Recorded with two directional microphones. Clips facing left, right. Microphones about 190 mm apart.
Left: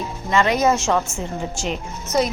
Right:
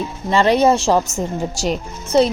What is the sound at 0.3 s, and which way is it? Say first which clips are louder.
A woman's voice: right 4 dB; 30° right (ahead or behind).